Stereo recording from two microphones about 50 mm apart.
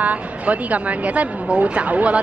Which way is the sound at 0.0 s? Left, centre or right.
Right.